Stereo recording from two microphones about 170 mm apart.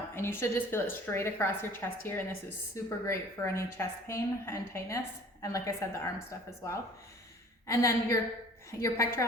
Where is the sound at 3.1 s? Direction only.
15° left (ahead or behind).